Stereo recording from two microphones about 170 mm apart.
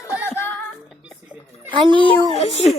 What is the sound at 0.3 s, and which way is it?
Music, 15° left (ahead or behind).